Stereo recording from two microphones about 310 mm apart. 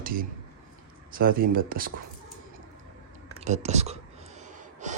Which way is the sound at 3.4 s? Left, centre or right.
Right.